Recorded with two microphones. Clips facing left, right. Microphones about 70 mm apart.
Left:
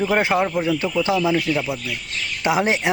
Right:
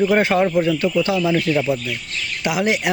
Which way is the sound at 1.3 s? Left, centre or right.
Centre.